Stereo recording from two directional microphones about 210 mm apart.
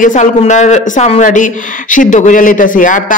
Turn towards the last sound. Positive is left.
turn(degrees=40)  # may be behind; listen again after turning